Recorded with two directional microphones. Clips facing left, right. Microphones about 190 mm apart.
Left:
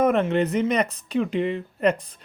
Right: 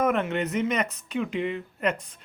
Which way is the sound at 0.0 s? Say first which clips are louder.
Left 5 dB; 30° left (ahead or behind).